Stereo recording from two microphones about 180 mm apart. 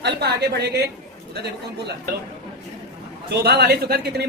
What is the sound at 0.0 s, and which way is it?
Speech, 65° right (ahead or behind).